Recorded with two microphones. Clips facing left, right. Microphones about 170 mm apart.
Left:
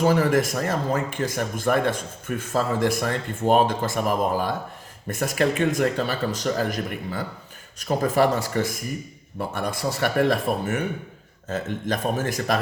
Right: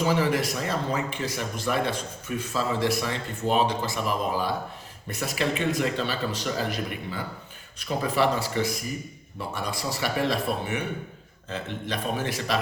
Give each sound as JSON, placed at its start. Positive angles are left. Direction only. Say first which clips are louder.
{"t": 0.0, "sound": "speech", "louder": "left 4 dB", "side_deg": 45}